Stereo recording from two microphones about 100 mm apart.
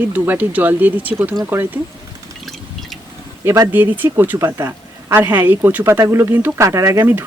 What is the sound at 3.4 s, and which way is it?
Speech, 25° right (ahead or behind).